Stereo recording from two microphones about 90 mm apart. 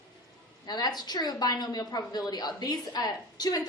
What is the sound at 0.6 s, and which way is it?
A woman's voice, 50° left (ahead or behind).